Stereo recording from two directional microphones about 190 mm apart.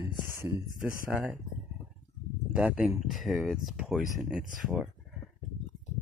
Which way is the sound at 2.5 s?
5° right (ahead or behind).